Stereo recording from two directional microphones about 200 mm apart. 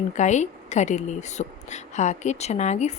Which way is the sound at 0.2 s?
35° left (ahead or behind).